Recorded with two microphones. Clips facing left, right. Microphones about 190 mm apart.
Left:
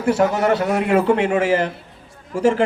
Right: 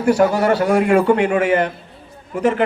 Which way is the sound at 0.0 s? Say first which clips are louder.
Right 2 dB; 25° left (ahead or behind).